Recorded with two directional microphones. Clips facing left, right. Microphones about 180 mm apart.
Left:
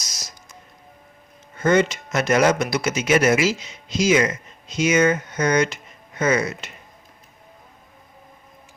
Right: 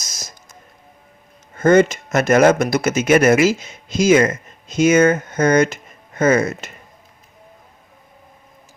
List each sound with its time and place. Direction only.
0.0 s music: 50° right (ahead or behind)
1.5 s speech: 50° right (ahead or behind)